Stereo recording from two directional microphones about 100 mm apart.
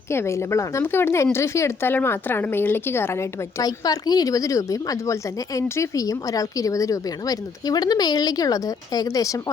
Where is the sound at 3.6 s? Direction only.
40° left (ahead or behind).